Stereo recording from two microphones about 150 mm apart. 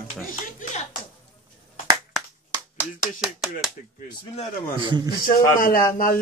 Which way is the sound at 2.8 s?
5° right (ahead or behind).